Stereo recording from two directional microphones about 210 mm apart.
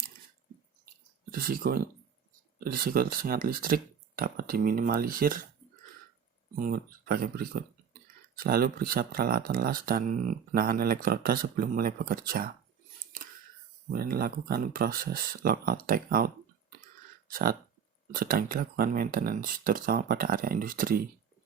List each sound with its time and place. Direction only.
1.3 s speech: 45° right (ahead or behind)
6.6 s speech: 45° right (ahead or behind)
13.9 s speech: 45° right (ahead or behind)